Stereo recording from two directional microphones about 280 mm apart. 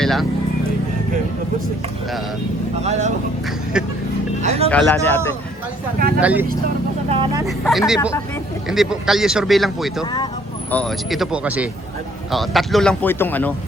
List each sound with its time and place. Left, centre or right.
0.0 s music: centre
2.8 s speech: right
4.4 s speech: right
4.7 s a man's voice: centre
6.1 s speech: centre
7.1 s speech: centre
7.4 s speech: centre
10.0 s a man's voice: centre
10.7 s speech: centre